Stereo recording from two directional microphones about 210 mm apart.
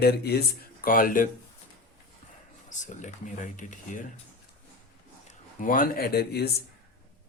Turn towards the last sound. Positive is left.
turn(degrees=50)  # may be behind; listen again after turning